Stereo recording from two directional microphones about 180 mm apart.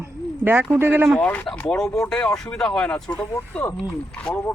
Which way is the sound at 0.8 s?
15° right (ahead or behind).